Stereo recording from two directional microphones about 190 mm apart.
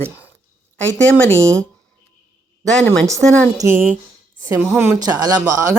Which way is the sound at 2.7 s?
5° left (ahead or behind).